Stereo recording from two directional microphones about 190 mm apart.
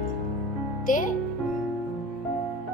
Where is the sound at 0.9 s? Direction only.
45° left (ahead or behind).